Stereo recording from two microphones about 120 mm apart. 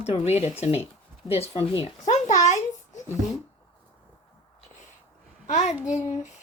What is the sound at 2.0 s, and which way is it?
A child's voice, 90° left.